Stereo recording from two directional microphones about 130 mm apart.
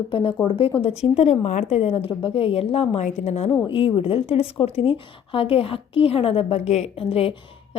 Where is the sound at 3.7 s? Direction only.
40° left (ahead or behind).